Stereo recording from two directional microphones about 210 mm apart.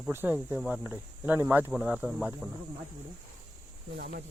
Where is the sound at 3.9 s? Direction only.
45° right (ahead or behind).